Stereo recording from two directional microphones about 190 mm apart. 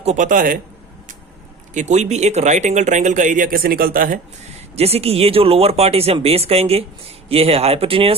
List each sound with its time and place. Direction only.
0.0 s a man's voice: 40° right (ahead or behind)
1.7 s speech: 40° right (ahead or behind)
4.7 s speech: 30° right (ahead or behind)